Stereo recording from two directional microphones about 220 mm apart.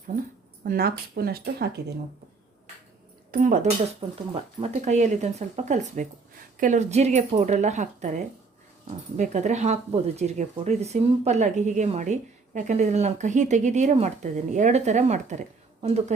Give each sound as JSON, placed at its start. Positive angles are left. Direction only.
{"t": 0.6, "sound": "speech", "side_deg": -45}
{"t": 3.3, "sound": "speech", "side_deg": -35}